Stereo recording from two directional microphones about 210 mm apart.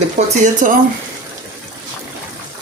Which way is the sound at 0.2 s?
35° right (ahead or behind).